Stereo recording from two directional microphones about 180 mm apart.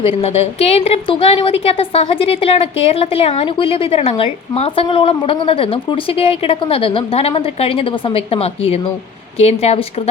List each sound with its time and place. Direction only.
0.0 s a woman's voice: 30° left (ahead or behind)